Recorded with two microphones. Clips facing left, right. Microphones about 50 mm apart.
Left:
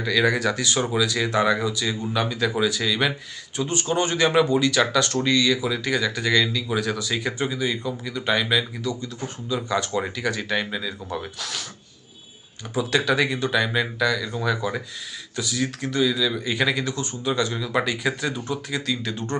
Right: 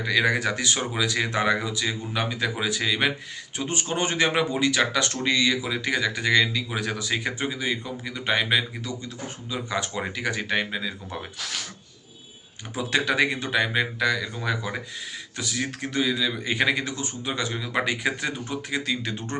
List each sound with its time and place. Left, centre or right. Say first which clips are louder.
0.0 s speech: left 2 dB; right
12.7 s speech: left 2 dB; right
15.4 s speech: left 3 dB; right